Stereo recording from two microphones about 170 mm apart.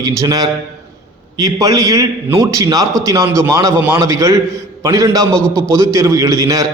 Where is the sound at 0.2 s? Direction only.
20° right (ahead or behind).